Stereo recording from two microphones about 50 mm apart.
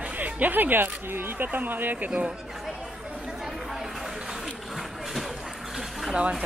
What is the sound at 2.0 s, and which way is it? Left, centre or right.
Speech, right.